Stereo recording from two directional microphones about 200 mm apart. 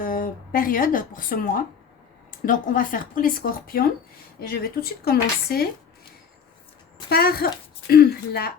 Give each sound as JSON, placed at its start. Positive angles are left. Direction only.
{"t": 0.0, "sound": "a woman's voice", "side_deg": 45}
{"t": 7.1, "sound": "a woman's voice", "side_deg": 50}